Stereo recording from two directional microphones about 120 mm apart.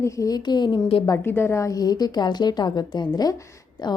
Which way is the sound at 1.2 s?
20° left (ahead or behind).